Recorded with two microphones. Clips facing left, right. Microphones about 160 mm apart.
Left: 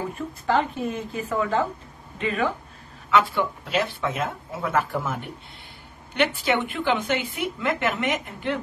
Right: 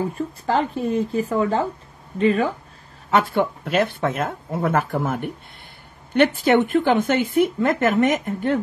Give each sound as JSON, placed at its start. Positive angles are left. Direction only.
{"t": 0.5, "sound": "speech", "side_deg": -35}
{"t": 3.1, "sound": "a woman's voice", "side_deg": -50}